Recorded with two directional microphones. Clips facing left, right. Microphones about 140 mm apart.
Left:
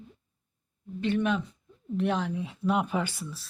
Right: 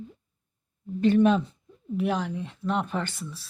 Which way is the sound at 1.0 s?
35° right (ahead or behind).